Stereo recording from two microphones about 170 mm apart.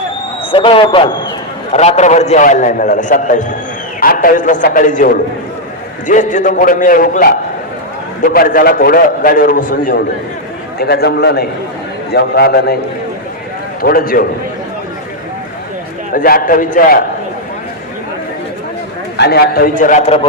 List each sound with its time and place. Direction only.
0.5 s a man's voice: 30° left (ahead or behind)
1.7 s a man's voice: 40° left (ahead or behind)
10.8 s a man's voice: 70° left (ahead or behind)
13.8 s a man's voice: 60° left (ahead or behind)
16.1 s a man's voice: 60° left (ahead or behind)
19.1 s a man's voice: 75° left (ahead or behind); by 20.1 s 50° left (ahead or behind)